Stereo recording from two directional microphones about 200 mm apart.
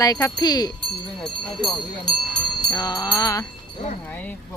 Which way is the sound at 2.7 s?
20° left (ahead or behind).